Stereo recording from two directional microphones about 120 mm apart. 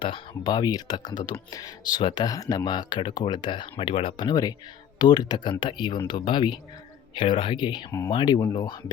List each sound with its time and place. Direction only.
0.0 s speech: 40° left (ahead or behind)